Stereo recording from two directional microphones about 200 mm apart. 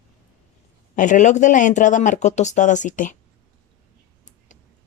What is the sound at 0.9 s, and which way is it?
Speech, 40° left (ahead or behind).